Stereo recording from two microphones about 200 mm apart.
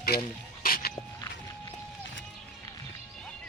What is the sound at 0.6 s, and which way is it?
Dog, 45° left (ahead or behind).